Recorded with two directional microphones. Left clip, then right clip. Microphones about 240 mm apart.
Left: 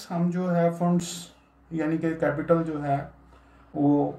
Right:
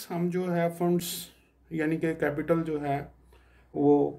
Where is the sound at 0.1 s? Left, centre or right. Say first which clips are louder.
Left 2 dB; right.